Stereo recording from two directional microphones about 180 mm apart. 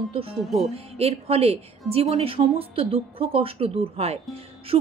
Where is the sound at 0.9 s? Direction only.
35° right (ahead or behind).